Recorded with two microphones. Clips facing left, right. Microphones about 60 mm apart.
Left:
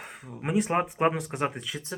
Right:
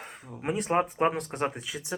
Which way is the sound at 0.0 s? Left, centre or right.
Centre.